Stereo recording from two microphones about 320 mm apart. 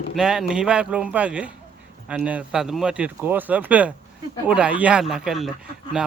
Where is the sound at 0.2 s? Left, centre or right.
Centre.